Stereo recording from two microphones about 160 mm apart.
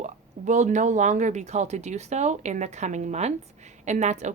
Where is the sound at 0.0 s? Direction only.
50° right (ahead or behind).